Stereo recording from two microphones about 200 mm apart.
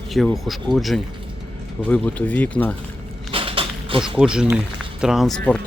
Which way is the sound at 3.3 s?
25° right (ahead or behind).